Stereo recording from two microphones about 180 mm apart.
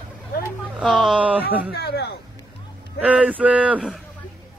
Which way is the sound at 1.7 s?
65° left (ahead or behind).